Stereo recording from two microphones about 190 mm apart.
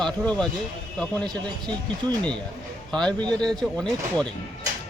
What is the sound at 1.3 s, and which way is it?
Speech, 20° right (ahead or behind).